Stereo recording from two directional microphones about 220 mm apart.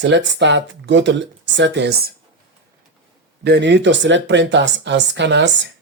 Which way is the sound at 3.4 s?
50° right (ahead or behind).